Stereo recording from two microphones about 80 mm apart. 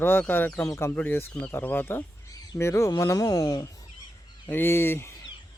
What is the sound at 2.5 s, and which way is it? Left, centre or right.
Speech, left.